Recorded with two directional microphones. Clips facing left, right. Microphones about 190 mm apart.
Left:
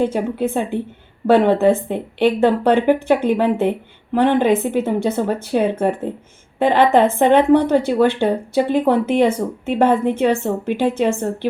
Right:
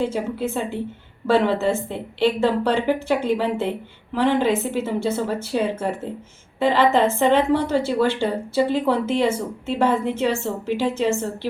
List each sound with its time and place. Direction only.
0.0 s a woman's voice: 55° left (ahead or behind)